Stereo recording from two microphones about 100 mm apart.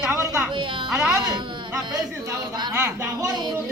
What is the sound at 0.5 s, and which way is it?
Music, 55° right (ahead or behind).